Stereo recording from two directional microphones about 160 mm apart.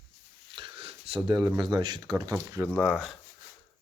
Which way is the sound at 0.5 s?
35° right (ahead or behind).